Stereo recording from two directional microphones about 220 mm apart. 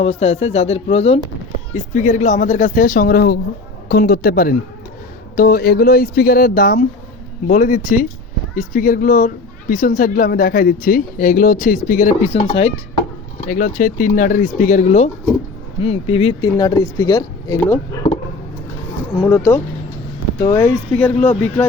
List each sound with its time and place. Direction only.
0.0 s speech: 30° left (ahead or behind)
13.5 s speech: 35° left (ahead or behind); by 17.7 s 15° left (ahead or behind)
19.3 s speech: 10° left (ahead or behind)